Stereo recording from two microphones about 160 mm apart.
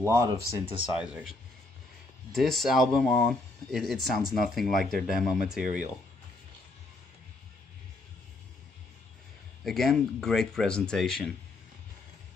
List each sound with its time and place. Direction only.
0.0 s speech: 20° right (ahead or behind)
0.9 s speech: 5° right (ahead or behind)
2.3 s speech: centre (ahead or behind)
5.6 s speech: 55° right (ahead or behind)
9.7 s speech: centre (ahead or behind)